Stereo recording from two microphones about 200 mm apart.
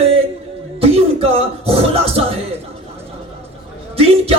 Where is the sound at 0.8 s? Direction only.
30° right (ahead or behind).